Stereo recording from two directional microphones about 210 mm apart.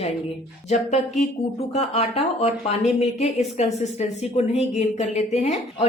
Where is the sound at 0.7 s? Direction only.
30° left (ahead or behind).